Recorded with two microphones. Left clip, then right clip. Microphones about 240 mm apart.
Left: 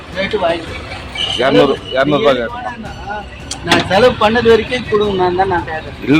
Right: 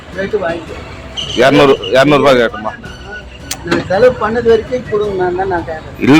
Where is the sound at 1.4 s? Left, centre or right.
Right.